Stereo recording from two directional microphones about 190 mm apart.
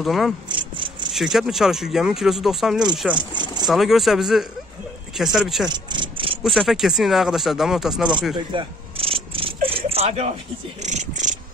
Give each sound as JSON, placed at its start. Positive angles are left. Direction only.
{"t": 0.0, "sound": "speech", "side_deg": 0}
{"t": 0.5, "sound": "a sound", "side_deg": -25}
{"t": 1.1, "sound": "speech", "side_deg": 0}
{"t": 3.2, "sound": "speech", "side_deg": -25}
{"t": 3.6, "sound": "speech", "side_deg": 0}
{"t": 5.7, "sound": "vehicle", "side_deg": -25}
{"t": 6.4, "sound": "speech", "side_deg": 0}
{"t": 8.5, "sound": "a sound", "side_deg": -30}
{"t": 10.8, "sound": "cat", "side_deg": -40}